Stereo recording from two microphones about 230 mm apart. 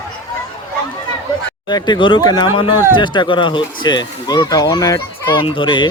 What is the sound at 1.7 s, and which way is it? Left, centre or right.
Speech, centre.